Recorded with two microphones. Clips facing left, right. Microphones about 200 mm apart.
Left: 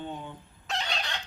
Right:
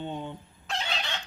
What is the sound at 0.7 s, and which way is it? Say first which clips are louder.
Fowl: even; centre (ahead or behind).